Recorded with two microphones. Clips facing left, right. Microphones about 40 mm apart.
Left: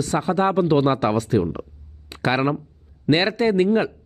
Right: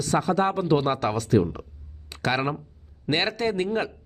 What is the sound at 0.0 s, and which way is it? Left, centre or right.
Speech, centre.